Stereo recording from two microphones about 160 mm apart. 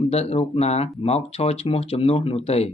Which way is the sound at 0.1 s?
40° left (ahead or behind).